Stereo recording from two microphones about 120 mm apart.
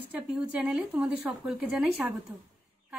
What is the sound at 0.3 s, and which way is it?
A woman's voice, 10° right (ahead or behind).